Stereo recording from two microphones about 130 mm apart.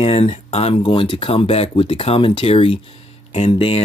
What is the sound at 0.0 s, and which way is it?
Speech, 50° left (ahead or behind).